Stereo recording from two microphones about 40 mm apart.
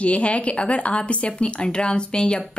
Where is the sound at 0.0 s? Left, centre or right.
Left.